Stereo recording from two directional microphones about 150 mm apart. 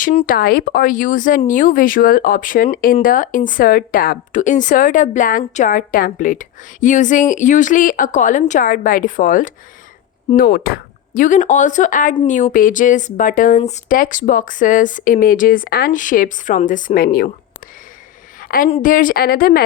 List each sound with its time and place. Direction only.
0.0 s speech: 45° left (ahead or behind)
0.3 s a woman's voice: 80° left; by 9.5 s 65° left (ahead or behind)
10.3 s speech: 85° left; by 13.6 s 60° left (ahead or behind)
13.6 s speech: 50° left (ahead or behind); by 17.2 s 75° left (ahead or behind)
18.3 s a sound: 70° left (ahead or behind)
18.8 s a woman's voice: 65° left (ahead or behind); by 19.6 s 80° left